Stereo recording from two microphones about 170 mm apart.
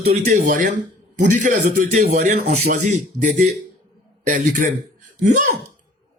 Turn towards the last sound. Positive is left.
turn(degrees=-50)  # may be behind; listen again after turning